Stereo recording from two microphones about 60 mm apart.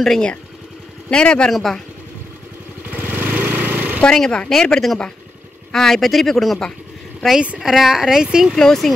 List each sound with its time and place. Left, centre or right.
0.0 s speech: centre
1.5 s speech: centre
2.9 s lawn mower: right
4.0 s speech: centre
8.5 s speech: centre